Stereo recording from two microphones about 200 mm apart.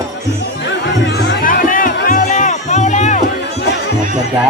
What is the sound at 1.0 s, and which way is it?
Music, 60° left (ahead or behind).